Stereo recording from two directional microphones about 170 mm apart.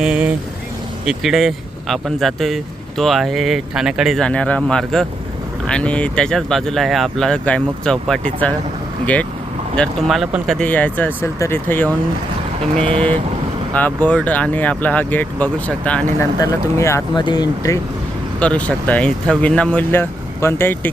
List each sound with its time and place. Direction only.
0.0 s speech: 5° right (ahead or behind)
9.7 s speech: 5° left (ahead or behind)
13.7 s speech: 10° left (ahead or behind)
18.3 s speech: 10° left (ahead or behind)